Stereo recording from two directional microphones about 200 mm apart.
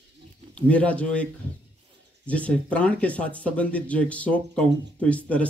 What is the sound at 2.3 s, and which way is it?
Speech, 5° left (ahead or behind).